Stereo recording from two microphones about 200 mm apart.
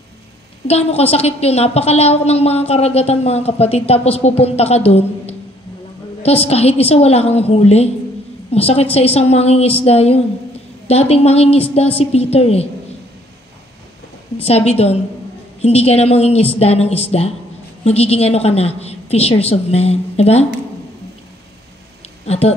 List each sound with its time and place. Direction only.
0.7 s a woman's voice: 30° left (ahead or behind)
6.4 s a woman's voice: 30° left (ahead or behind)
14.4 s a woman's voice: 30° left (ahead or behind)
22.2 s speech: 30° left (ahead or behind)